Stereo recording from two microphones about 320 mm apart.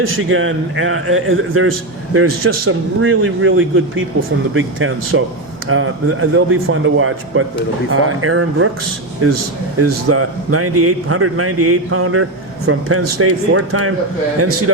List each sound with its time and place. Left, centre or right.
0.2 s a man's voice: right
9.7 s a man's voice: right